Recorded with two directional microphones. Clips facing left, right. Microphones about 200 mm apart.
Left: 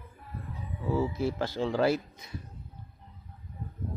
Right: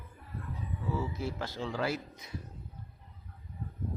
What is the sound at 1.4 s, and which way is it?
Speech, 30° left (ahead or behind).